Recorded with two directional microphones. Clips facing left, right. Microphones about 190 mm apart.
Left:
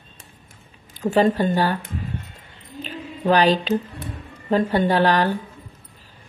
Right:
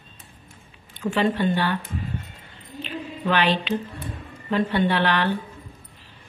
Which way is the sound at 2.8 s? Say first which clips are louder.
Left 1 dB; 40° left (ahead or behind).